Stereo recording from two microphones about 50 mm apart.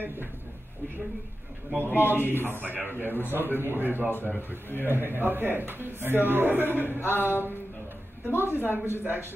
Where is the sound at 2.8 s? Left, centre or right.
Left.